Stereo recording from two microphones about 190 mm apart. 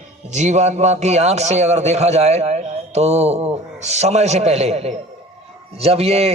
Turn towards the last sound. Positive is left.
turn(degrees=-30)  # may be behind; listen again after turning